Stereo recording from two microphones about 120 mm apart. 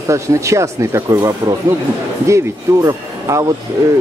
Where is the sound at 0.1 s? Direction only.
25° right (ahead or behind).